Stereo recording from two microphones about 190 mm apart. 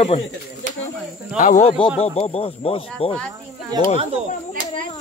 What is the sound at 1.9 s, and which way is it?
A man's voice, 30° left (ahead or behind).